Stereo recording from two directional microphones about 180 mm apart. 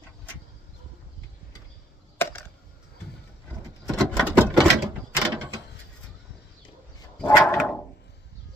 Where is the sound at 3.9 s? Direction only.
5° right (ahead or behind).